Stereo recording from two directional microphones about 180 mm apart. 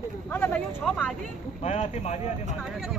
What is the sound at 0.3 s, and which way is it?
Speech, 10° left (ahead or behind).